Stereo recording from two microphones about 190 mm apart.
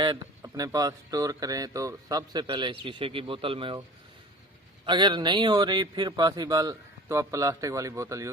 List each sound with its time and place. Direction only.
0.0 s a man's voice: 20° right (ahead or behind)
4.9 s a man's voice: 25° right (ahead or behind)